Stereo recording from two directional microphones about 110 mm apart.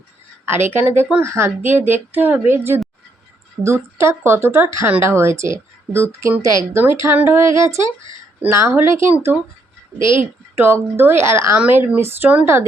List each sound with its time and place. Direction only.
0.7 s a woman's voice: 20° right (ahead or behind)
10.0 s a woman's voice: 50° left (ahead or behind)
10.6 s a woman's voice: 20° right (ahead or behind)